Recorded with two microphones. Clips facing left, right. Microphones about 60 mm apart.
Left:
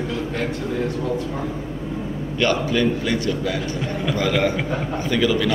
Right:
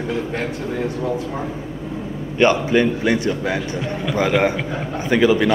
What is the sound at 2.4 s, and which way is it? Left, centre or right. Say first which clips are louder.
A man's voice: right 4 dB; right.